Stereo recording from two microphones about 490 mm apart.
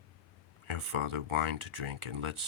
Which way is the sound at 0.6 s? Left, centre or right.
Right.